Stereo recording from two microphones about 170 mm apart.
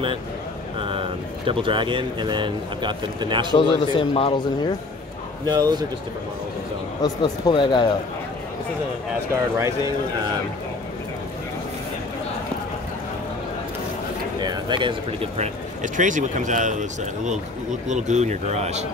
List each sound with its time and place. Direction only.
0.8 s speech: 30° right (ahead or behind)
3.5 s speech: 30° left (ahead or behind)
5.5 s speech: 25° right (ahead or behind)
7.0 s speech: 25° left (ahead or behind)
14.4 s a sound: 25° right (ahead or behind)
15.3 s speech: 45° right (ahead or behind)